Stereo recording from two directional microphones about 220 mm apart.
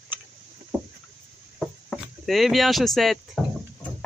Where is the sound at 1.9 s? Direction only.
Centre (ahead or behind).